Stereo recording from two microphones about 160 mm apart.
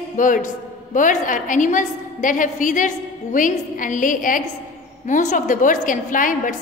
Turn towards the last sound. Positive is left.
turn(degrees=55)  # may be behind; listen again after turning